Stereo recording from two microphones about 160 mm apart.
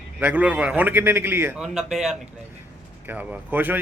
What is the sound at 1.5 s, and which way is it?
A man's voice, centre (ahead or behind).